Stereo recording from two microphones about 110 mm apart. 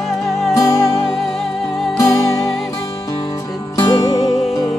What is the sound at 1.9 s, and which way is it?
Music, 30° left (ahead or behind).